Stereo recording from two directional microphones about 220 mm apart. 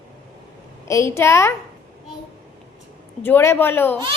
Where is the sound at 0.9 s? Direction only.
15° left (ahead or behind).